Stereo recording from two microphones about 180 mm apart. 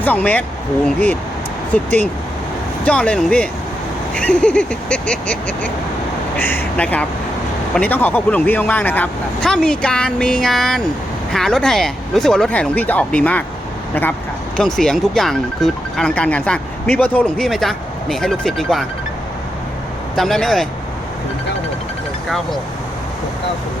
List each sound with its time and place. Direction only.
0.0 s speech: 10° left (ahead or behind)
14.5 s speech: 5° left (ahead or behind)
20.1 s speech: centre (ahead or behind)